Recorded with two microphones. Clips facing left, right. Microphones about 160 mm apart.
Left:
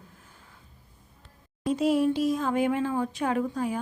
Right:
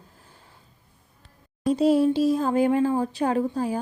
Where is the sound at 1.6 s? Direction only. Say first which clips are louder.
Right 4 dB; 30° right (ahead or behind).